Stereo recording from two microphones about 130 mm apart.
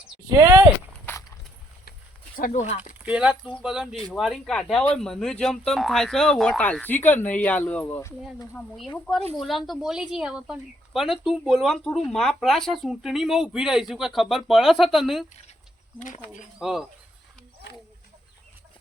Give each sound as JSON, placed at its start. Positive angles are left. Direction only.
{"t": 0.3, "sound": "speech", "side_deg": -25}
{"t": 1.1, "sound": "a sound", "side_deg": 15}
{"t": 2.3, "sound": "speech", "side_deg": 80}
{"t": 3.0, "sound": "speech", "side_deg": -10}
{"t": 7.9, "sound": "speech", "side_deg": 20}
{"t": 8.5, "sound": "speech", "side_deg": 0}
{"t": 16.0, "sound": "speech", "side_deg": 75}
{"t": 16.6, "sound": "speech", "side_deg": -5}